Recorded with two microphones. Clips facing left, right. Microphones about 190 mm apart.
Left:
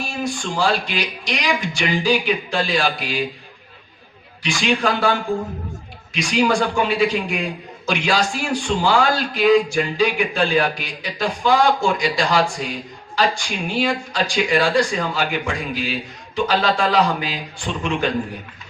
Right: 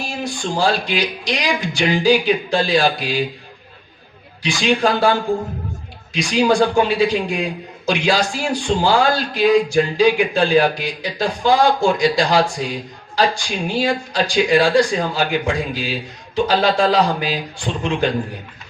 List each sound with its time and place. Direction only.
0.4 s a man's voice: 35° right (ahead or behind)
4.4 s a man's voice: 35° right (ahead or behind)
6.1 s a man's voice: 35° right (ahead or behind)